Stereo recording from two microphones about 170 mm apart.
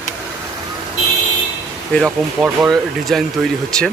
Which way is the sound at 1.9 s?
10° left (ahead or behind).